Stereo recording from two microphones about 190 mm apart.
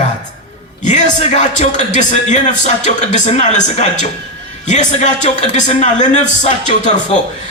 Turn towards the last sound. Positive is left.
turn(degrees=40)  # may be behind; listen again after turning